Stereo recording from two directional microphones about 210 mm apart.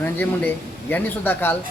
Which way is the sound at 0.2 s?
10° left (ahead or behind).